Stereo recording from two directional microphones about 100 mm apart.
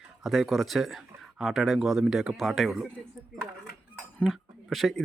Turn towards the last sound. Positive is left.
turn(degrees=0)  # may be behind; listen again after turning